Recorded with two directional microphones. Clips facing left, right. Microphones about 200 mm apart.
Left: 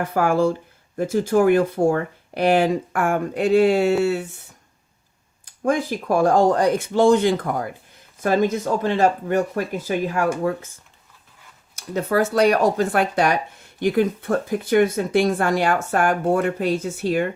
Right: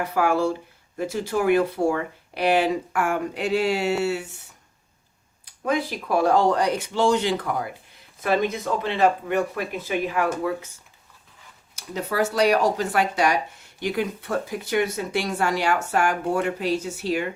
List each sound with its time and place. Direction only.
0.0 s speech: 50° left (ahead or behind)
5.6 s speech: 45° left (ahead or behind)
11.7 s speech: 50° left (ahead or behind)